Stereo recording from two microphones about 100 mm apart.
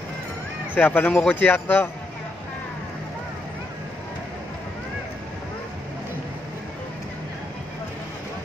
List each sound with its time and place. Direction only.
0.7 s a man's voice: 20° left (ahead or behind)